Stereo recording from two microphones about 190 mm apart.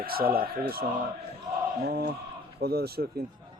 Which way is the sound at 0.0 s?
50° right (ahead or behind).